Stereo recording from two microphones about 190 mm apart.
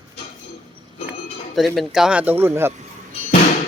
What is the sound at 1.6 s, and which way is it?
Speech, centre (ahead or behind).